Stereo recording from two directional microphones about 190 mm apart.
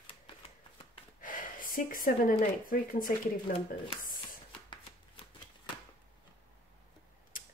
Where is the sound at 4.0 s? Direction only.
45° left (ahead or behind).